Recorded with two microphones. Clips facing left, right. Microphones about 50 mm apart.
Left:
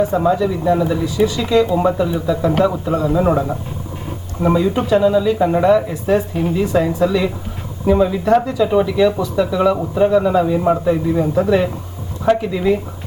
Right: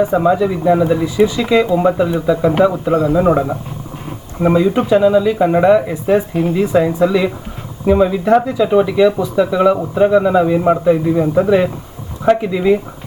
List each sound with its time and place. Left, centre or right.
0.0 s speech: right
1.7 s a man's voice: centre
4.4 s speech: right